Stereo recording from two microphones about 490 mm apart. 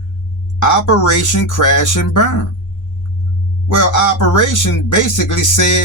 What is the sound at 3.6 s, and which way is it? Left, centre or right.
Speech, left.